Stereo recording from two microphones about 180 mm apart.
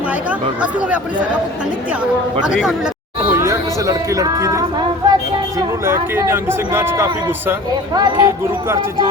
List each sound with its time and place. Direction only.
0.3 s speech: 10° right (ahead or behind)
2.4 s speech: 5° right (ahead or behind)
7.9 s speech: 25° right (ahead or behind)